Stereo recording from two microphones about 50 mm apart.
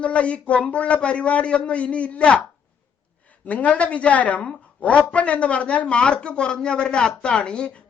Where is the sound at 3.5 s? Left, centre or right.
Left.